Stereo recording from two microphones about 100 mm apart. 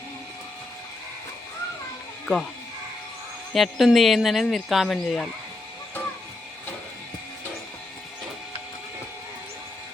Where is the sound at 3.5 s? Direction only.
Centre (ahead or behind).